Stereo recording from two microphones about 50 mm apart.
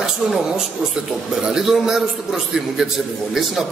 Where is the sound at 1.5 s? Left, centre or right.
Centre.